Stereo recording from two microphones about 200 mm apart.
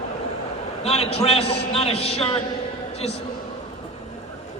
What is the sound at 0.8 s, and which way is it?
A woman's voice, 30° left (ahead or behind).